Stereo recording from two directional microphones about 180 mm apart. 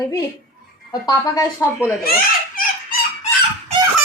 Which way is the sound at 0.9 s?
20° left (ahead or behind).